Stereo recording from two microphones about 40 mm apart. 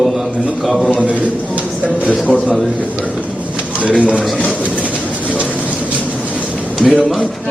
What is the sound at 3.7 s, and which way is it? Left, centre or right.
Speech, right.